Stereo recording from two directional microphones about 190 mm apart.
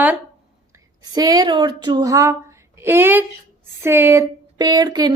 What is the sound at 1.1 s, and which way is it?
Speech, 20° right (ahead or behind).